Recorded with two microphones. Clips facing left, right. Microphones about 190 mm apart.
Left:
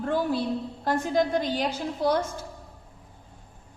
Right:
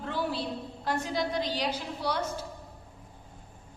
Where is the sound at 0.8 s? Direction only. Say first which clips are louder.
Left 6 dB; 50° left (ahead or behind).